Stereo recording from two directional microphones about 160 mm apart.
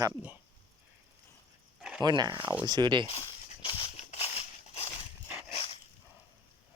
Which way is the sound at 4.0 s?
40° left (ahead or behind).